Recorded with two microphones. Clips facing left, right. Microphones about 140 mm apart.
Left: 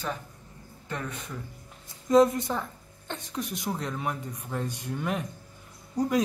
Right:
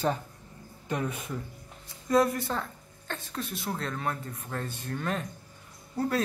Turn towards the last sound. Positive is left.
turn(degrees=15)  # may be behind; listen again after turning